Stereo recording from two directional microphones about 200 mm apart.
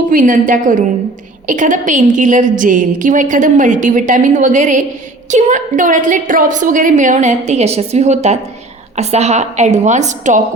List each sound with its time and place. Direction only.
0.1 s a woman's voice: 40° right (ahead or behind)